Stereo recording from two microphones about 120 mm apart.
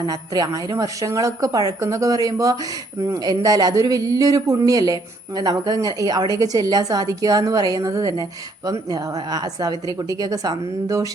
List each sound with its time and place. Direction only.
0.0 s a woman's voice: 30° right (ahead or behind)